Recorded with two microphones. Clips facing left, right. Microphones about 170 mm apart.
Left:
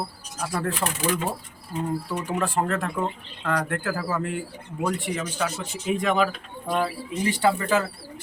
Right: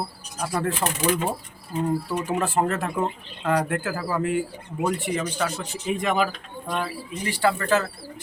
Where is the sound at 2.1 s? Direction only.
Centre (ahead or behind).